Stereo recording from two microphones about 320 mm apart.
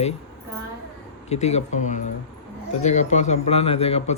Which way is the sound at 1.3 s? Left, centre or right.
Centre.